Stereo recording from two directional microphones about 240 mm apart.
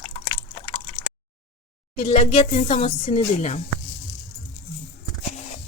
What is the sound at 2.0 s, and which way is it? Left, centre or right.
Speech, left.